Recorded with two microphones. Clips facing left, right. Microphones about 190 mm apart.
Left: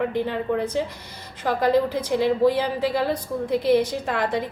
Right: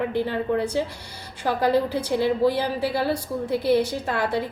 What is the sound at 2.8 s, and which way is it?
A woman's voice, 10° right (ahead or behind).